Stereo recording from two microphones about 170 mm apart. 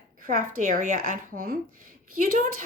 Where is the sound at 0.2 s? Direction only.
50° right (ahead or behind).